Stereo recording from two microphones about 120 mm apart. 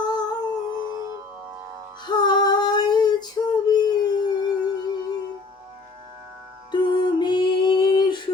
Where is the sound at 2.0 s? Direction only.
35° left (ahead or behind).